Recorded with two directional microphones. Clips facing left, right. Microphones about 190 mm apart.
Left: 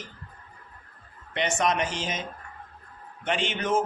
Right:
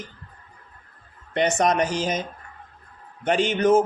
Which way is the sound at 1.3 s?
40° right (ahead or behind).